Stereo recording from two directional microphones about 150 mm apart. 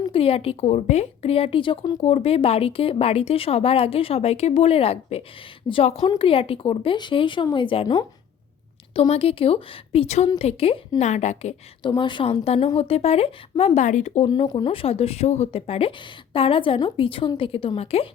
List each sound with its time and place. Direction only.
0.1 s speech: 40° left (ahead or behind)
2.0 s speech: 45° left (ahead or behind)
9.0 s a woman's voice: 40° left (ahead or behind)
11.8 s speech: 30° left (ahead or behind); by 14.3 s 50° left (ahead or behind)
14.3 s speech: 30° left (ahead or behind)